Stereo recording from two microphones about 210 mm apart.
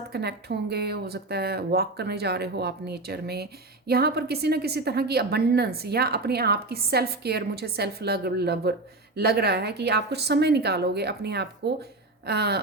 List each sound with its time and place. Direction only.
0.1 s speech: 50° right (ahead or behind)